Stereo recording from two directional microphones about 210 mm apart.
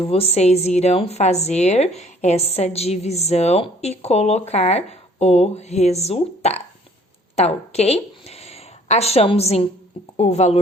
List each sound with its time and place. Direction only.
0.0 s speech: 30° left (ahead or behind)